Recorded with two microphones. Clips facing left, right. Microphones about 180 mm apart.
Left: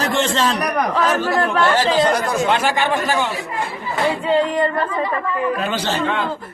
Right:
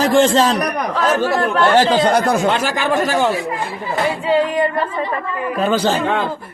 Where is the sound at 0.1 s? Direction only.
40° right (ahead or behind).